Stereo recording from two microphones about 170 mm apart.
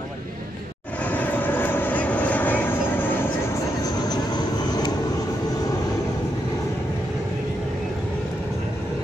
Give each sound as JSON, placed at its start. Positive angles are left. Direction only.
{"t": 1.0, "sound": "vehicle", "side_deg": 10}
{"t": 3.8, "sound": "vehicle", "side_deg": 25}